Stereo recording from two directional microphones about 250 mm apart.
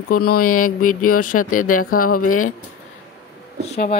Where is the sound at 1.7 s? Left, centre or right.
Left.